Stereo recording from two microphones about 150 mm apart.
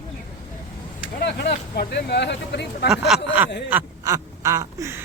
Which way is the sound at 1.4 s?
90° left.